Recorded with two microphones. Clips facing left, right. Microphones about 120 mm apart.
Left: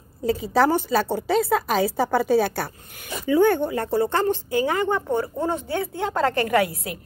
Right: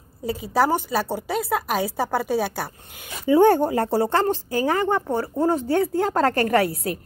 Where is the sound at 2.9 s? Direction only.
20° right (ahead or behind).